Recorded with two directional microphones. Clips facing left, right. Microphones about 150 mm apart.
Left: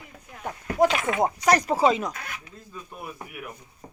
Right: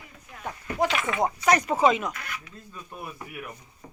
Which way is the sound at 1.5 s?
35° left (ahead or behind).